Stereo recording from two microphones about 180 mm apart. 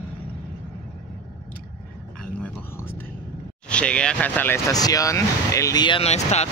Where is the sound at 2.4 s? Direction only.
10° left (ahead or behind).